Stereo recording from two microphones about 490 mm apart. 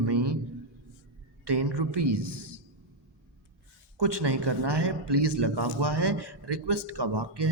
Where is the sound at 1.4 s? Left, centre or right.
Right.